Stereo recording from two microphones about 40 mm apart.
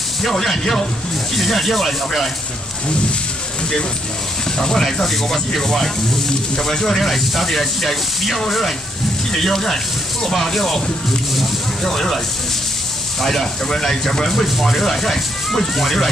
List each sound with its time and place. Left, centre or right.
0.2 s speech: centre
4.6 s speech: centre
5.0 s speech: centre
13.2 s speech: centre